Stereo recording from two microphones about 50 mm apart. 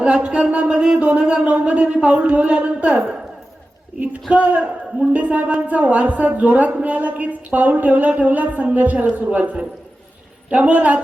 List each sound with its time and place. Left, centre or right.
0.0 s speech: centre
4.3 s a woman's voice: right